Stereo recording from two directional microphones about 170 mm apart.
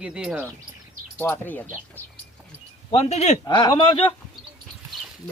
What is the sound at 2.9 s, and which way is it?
Speech, 40° left (ahead or behind).